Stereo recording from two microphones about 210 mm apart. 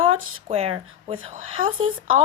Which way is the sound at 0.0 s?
30° right (ahead or behind).